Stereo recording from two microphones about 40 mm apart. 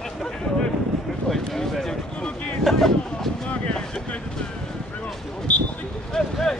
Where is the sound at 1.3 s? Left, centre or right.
Centre.